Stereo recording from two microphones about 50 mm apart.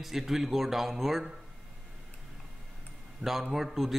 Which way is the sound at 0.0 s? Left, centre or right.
Centre.